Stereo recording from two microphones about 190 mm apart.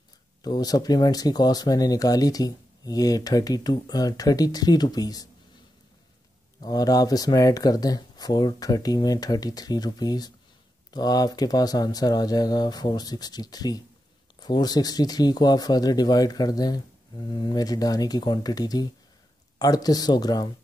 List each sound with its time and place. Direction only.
0.4 s speech: 20° left (ahead or behind)
6.6 s speech: 20° left (ahead or behind)